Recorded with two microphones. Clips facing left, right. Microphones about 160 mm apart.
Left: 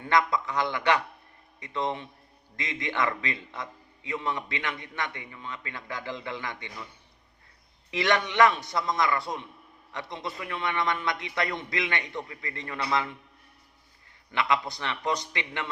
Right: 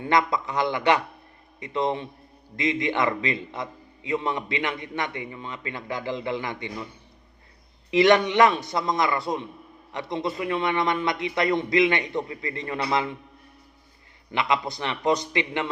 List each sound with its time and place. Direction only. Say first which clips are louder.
0.0 s a man's voice: right 2 dB; 20° right (ahead or behind)
7.9 s a man's voice: right 6 dB; 15° right (ahead or behind)
14.3 s a man's voice: right 2 dB; 15° right (ahead or behind)